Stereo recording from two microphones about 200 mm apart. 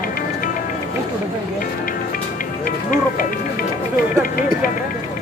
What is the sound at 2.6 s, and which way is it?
Music, 45° left (ahead or behind).